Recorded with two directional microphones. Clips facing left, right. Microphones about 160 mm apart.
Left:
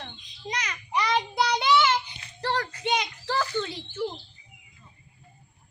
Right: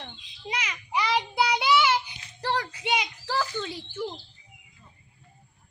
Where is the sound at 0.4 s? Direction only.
10° right (ahead or behind).